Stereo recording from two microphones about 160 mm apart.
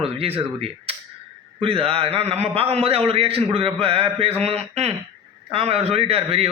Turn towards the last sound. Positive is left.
turn(degrees=-40)  # may be behind; listen again after turning